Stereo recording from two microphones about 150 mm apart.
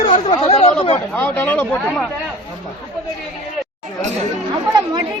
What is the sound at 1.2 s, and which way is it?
Speech, 10° left (ahead or behind).